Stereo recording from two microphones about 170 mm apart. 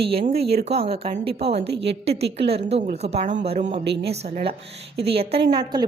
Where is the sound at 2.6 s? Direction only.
35° right (ahead or behind).